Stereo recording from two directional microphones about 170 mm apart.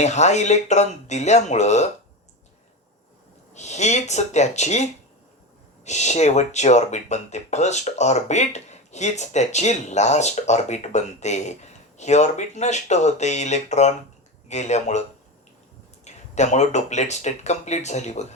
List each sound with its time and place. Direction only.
0.0 s speech: 40° left (ahead or behind)
3.5 s speech: 40° left (ahead or behind)
16.0 s speech: 40° left (ahead or behind)